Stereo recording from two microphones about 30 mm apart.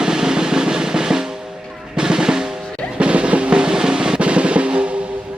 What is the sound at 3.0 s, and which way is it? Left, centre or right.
Drum, right.